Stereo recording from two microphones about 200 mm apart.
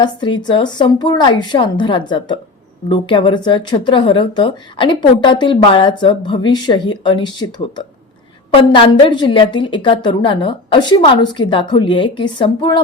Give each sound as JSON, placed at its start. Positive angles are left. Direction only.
{"t": 0.0, "sound": "speech", "side_deg": 20}
{"t": 8.4, "sound": "speech", "side_deg": 25}